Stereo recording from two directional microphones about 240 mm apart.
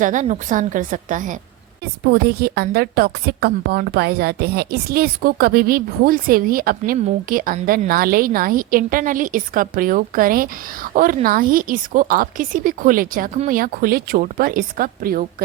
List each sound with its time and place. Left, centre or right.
0.0 s a woman's voice: right